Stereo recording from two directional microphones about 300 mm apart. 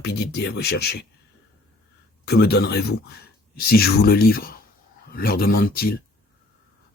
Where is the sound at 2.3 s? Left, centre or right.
Left.